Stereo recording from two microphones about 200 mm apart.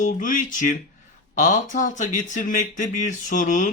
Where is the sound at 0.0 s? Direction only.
40° left (ahead or behind).